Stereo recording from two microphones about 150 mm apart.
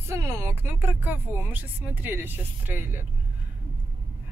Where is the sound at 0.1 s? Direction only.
15° right (ahead or behind).